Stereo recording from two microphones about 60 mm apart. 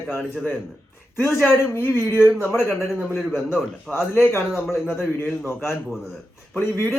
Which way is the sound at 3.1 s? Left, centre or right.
Centre.